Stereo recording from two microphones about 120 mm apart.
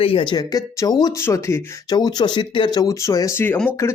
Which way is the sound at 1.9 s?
35° left (ahead or behind).